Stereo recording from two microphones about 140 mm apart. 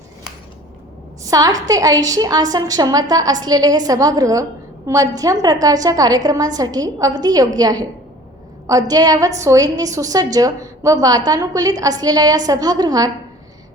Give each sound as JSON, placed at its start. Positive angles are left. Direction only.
{"t": 1.2, "sound": "a woman's voice", "side_deg": -25}